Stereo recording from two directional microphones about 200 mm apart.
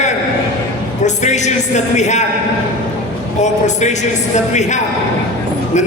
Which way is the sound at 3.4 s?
35° left (ahead or behind).